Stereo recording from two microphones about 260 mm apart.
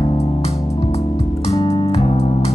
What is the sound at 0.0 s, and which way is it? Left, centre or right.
Music, left.